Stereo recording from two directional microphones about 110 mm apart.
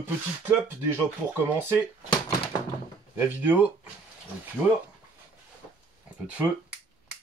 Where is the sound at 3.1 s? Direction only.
20° right (ahead or behind).